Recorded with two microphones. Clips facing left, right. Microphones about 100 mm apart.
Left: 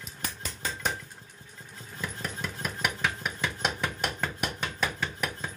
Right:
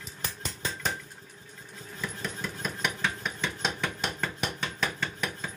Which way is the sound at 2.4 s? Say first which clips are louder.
Left 1 dB; 5° left (ahead or behind).